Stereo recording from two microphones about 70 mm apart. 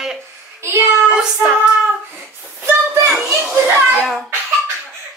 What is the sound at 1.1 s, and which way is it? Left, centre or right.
Child singing, centre.